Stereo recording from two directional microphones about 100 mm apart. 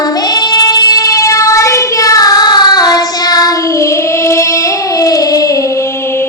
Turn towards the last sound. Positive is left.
turn(degrees=35)  # may be behind; listen again after turning